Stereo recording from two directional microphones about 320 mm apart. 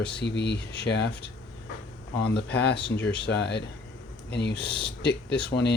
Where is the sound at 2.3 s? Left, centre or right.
Left.